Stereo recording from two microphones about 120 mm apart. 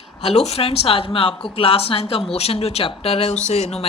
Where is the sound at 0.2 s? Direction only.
60° left (ahead or behind).